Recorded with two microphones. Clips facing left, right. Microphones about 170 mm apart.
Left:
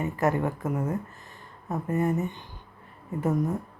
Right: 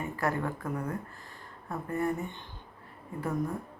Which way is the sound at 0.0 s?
20° left (ahead or behind).